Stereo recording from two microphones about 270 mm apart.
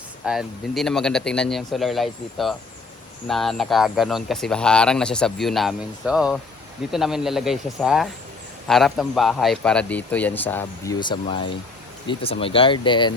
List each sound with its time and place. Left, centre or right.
0.3 s speech: centre